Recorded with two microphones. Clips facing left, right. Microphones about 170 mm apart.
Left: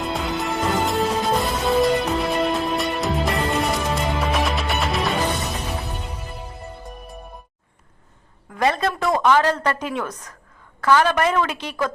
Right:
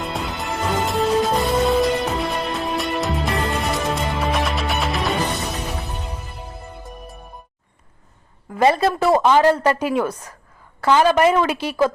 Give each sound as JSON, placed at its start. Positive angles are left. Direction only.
{"t": 0.0, "sound": "music", "side_deg": 0}
{"t": 8.7, "sound": "a woman's voice", "side_deg": -5}
{"t": 9.2, "sound": "a woman's voice", "side_deg": -15}
{"t": 10.8, "sound": "a woman's voice", "side_deg": -20}